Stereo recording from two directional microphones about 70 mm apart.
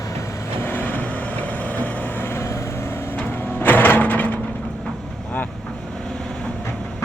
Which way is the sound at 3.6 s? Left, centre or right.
Left.